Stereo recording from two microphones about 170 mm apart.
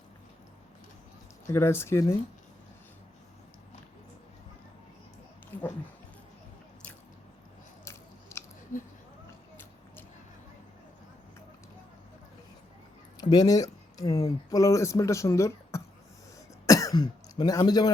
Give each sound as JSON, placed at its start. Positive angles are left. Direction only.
{"t": 1.5, "sound": "speech", "side_deg": 15}
{"t": 7.9, "sound": "biting", "side_deg": 15}
{"t": 13.1, "sound": "speech", "side_deg": 25}